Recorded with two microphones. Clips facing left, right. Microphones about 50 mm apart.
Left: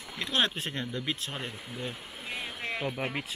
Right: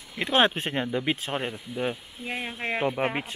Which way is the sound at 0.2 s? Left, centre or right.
Right.